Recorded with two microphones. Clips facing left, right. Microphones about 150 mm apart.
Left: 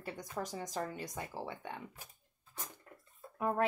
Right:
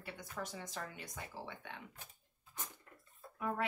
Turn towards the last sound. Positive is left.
turn(degrees=40)  # may be behind; listen again after turning